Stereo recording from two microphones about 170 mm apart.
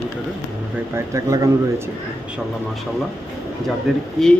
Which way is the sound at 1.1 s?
20° right (ahead or behind).